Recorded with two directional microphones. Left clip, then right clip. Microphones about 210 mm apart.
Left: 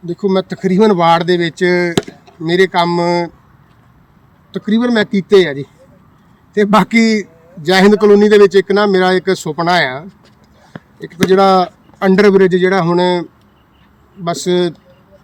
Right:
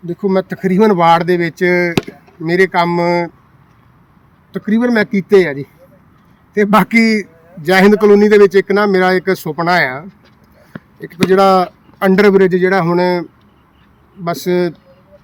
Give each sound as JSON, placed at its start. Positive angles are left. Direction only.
{"t": 0.0, "sound": "a man's voice", "side_deg": -5}
{"t": 4.5, "sound": "a man's voice", "side_deg": 0}
{"t": 10.7, "sound": "a sound", "side_deg": -45}
{"t": 11.3, "sound": "a man's voice", "side_deg": -5}
{"t": 14.3, "sound": "a man's voice", "side_deg": 0}